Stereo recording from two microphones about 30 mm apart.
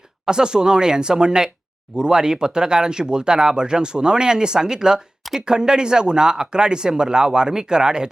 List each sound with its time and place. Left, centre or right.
0.3 s speech: right